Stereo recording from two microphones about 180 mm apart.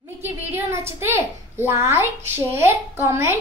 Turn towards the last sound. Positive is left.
turn(degrees=-15)  # may be behind; listen again after turning